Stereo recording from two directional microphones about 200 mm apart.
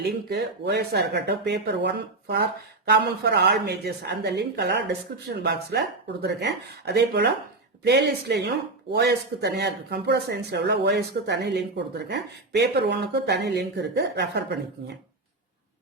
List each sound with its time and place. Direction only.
0.3 s speech: 55° right (ahead or behind)